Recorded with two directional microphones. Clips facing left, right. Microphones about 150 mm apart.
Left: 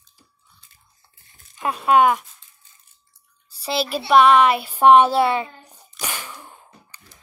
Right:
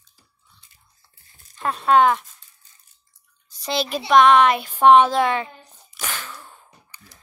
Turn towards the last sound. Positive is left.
turn(degrees=15)  # may be behind; listen again after turning